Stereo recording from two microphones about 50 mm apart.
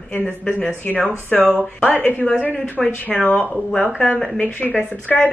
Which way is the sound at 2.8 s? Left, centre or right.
Centre.